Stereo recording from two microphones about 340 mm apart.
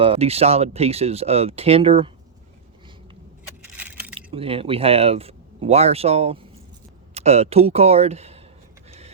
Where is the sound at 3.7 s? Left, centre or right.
Centre.